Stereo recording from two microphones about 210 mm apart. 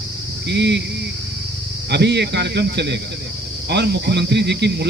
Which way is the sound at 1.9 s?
55° right (ahead or behind).